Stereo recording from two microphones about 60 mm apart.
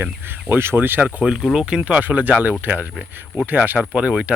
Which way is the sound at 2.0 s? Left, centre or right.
Right.